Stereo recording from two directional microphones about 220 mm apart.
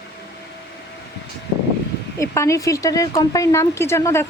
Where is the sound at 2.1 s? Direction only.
15° left (ahead or behind).